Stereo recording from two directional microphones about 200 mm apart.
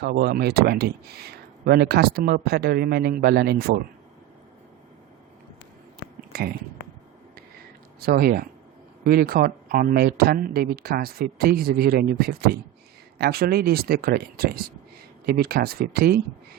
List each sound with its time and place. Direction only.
0.0 s speech: 50° right (ahead or behind)
6.3 s speech: 50° right (ahead or behind)
8.0 s speech: 50° right (ahead or behind)